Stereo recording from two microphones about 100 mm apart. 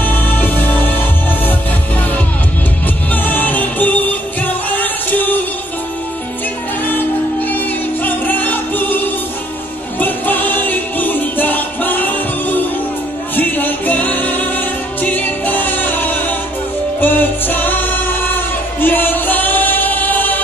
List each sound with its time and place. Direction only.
0.0 s music: 20° left (ahead or behind)
3.1 s music: 20° left (ahead or behind)
6.8 s music: 20° left (ahead or behind)